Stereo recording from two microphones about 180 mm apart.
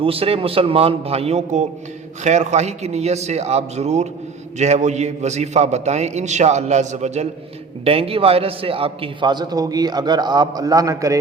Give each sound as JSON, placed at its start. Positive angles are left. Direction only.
{"t": 0.0, "sound": "a man's voice", "side_deg": -30}